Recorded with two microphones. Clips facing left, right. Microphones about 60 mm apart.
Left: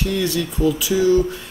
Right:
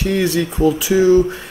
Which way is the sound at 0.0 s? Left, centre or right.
Right.